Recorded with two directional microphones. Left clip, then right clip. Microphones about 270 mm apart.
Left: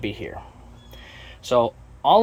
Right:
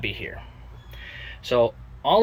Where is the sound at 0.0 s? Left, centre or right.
Centre.